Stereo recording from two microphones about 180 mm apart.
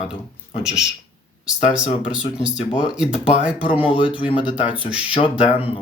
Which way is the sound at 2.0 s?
5° right (ahead or behind).